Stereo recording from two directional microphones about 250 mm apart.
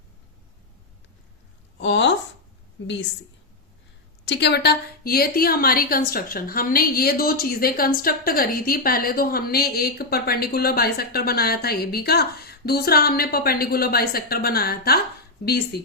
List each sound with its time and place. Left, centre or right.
1.8 s a woman's voice: left
4.3 s a woman's voice: left